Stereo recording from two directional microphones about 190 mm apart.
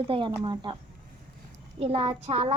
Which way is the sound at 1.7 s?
30° right (ahead or behind).